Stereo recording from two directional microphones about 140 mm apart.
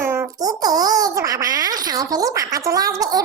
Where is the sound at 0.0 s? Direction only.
20° right (ahead or behind).